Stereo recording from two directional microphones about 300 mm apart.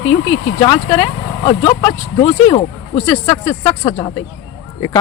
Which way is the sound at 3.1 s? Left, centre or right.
Centre.